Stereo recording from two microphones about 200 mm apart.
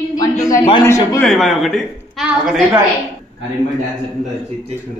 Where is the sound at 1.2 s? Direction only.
Centre (ahead or behind).